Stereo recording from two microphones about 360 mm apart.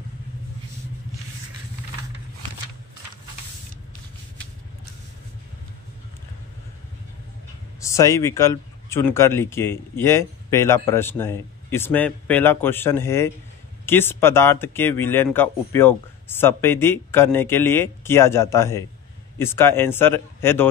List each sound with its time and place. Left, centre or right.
7.8 s speech: centre